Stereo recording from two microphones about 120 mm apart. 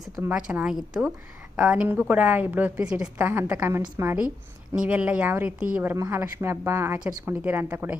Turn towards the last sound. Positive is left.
turn(degrees=-15)  # may be behind; listen again after turning